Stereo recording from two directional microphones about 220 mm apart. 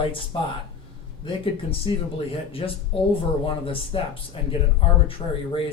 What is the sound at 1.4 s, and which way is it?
Speech, 25° left (ahead or behind).